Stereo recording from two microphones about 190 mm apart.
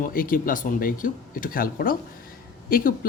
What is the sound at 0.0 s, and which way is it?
A man's voice, 45° left (ahead or behind).